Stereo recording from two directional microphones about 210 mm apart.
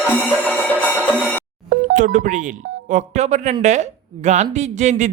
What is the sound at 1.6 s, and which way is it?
A woman's voice, 40° right (ahead or behind).